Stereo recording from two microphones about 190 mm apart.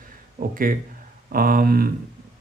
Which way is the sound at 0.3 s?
45° right (ahead or behind).